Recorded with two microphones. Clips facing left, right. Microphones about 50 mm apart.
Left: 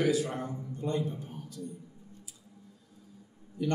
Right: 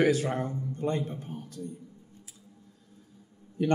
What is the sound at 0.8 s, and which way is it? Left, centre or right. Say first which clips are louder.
Speech: right 3 dB; right.